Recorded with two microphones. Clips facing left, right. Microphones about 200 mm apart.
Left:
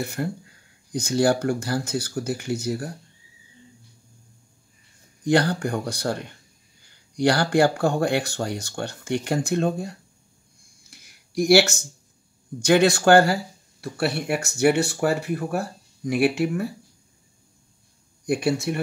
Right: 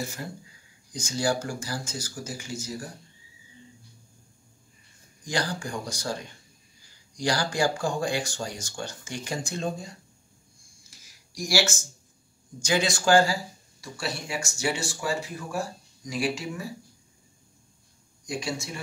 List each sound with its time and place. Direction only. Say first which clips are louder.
0.0 s speech: left 7 dB; 60° left (ahead or behind)
5.2 s speech: left 10 dB; 60° left (ahead or behind)
10.9 s a sound: left 6 dB; 60° left (ahead or behind)
12.5 s speech: left 9 dB; 60° left (ahead or behind)
18.2 s speech: left 10 dB; 60° left (ahead or behind)